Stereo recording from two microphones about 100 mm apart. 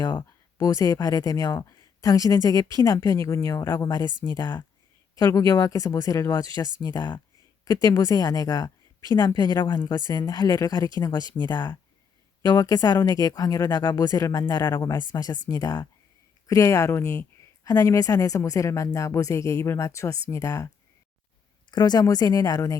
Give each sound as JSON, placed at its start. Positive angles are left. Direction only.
{"t": 0.0, "sound": "speech", "side_deg": 45}
{"t": 5.1, "sound": "a woman's voice", "side_deg": 35}
{"t": 21.7, "sound": "speech", "side_deg": 45}